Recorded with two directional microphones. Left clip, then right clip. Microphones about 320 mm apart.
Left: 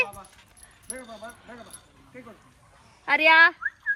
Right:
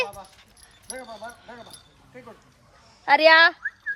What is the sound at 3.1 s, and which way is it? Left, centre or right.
Speech, right.